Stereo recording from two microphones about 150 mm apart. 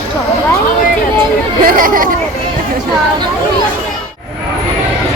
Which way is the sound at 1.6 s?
70° right (ahead or behind).